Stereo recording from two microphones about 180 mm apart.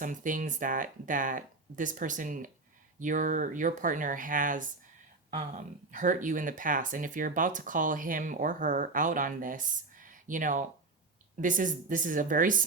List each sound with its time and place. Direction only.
0.0 s speech: 45° right (ahead or behind)